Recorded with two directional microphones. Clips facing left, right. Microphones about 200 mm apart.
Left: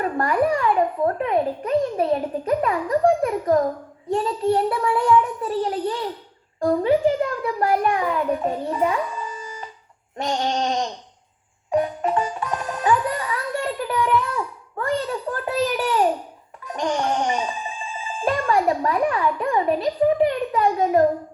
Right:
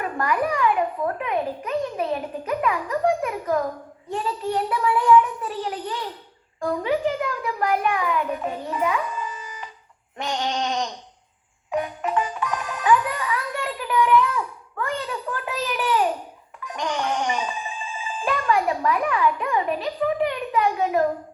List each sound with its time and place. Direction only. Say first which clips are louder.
0.0 s a child's voice: left 4 dB; 35° left (ahead or behind)
10.2 s music: left 3 dB; 35° left (ahead or behind)
18.2 s a child's voice: left 2 dB; 35° left (ahead or behind)